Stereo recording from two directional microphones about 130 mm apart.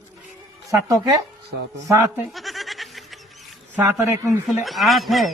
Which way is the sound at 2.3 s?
Centre (ahead or behind).